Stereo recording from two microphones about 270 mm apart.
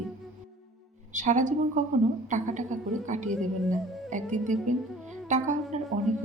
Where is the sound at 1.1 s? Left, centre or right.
Right.